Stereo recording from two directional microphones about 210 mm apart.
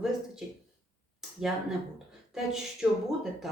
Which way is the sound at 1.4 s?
Centre (ahead or behind).